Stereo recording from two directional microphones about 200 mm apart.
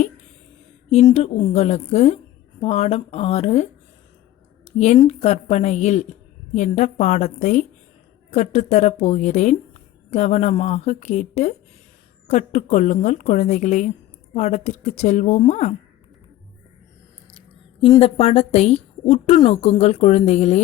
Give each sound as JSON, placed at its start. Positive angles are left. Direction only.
{"t": 1.1, "sound": "a woman's voice", "side_deg": 30}
{"t": 5.0, "sound": "a woman's voice", "side_deg": 35}
{"t": 18.0, "sound": "a woman's voice", "side_deg": 30}